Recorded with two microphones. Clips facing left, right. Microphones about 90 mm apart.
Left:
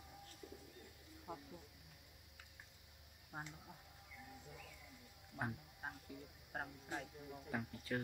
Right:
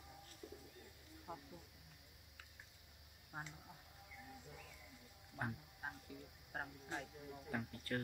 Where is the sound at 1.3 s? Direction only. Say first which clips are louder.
Left 1 dB; 5° left (ahead or behind).